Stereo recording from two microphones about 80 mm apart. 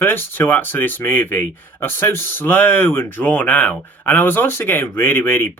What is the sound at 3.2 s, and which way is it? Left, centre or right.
Speech, centre.